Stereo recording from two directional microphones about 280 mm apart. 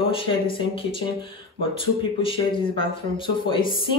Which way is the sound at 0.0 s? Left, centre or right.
Centre.